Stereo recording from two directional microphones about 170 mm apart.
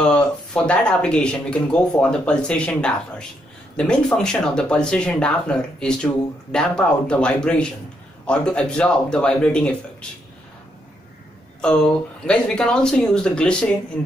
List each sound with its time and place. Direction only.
0.0 s speech: 5° left (ahead or behind)
11.6 s speech: 5° left (ahead or behind)